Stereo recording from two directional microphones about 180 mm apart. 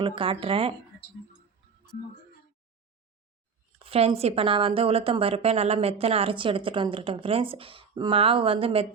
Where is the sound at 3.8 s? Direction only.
35° right (ahead or behind).